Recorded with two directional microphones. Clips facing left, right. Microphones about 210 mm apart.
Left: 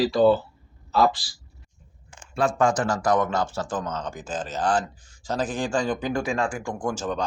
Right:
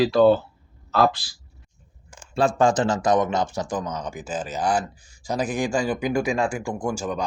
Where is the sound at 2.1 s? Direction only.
30° right (ahead or behind).